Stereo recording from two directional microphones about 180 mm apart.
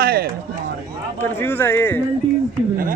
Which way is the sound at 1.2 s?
10° left (ahead or behind).